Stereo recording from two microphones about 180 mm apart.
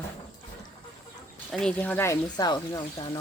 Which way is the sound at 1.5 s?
5° left (ahead or behind).